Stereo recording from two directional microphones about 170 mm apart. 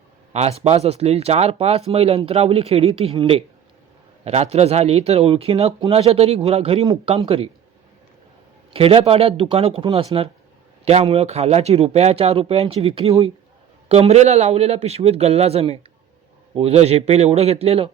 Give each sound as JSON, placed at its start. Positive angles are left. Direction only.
{"t": 0.3, "sound": "speech", "side_deg": -40}
{"t": 8.7, "sound": "speech", "side_deg": -35}